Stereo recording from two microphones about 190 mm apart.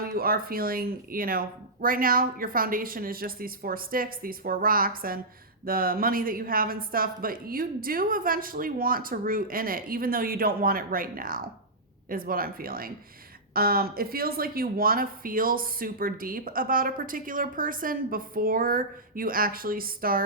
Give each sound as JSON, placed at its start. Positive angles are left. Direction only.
{"t": 0.0, "sound": "speech", "side_deg": -50}